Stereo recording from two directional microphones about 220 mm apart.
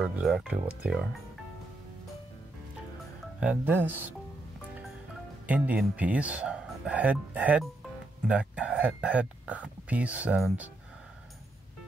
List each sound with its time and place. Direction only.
0.0 s speech: 5° right (ahead or behind)
3.3 s speech: 5° right (ahead or behind)
5.5 s speech: 5° right (ahead or behind)